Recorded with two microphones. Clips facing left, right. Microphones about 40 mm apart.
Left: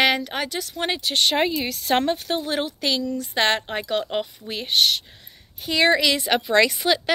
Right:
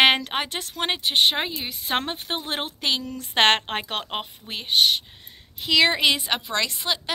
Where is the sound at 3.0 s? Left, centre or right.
Right.